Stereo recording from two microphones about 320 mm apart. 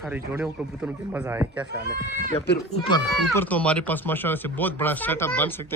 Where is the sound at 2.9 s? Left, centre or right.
Centre.